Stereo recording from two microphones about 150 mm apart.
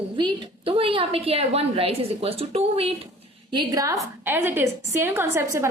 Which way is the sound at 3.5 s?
25° right (ahead or behind).